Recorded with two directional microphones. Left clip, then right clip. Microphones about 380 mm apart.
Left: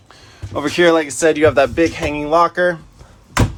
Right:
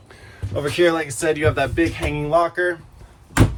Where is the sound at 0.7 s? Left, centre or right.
Centre.